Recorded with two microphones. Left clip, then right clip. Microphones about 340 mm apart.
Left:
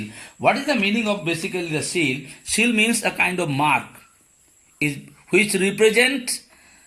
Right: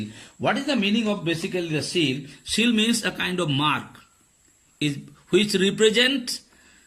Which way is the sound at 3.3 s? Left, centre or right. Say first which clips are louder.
Left 4 dB; left.